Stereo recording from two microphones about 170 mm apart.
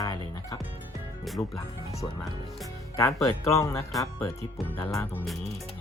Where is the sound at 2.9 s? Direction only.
15° left (ahead or behind).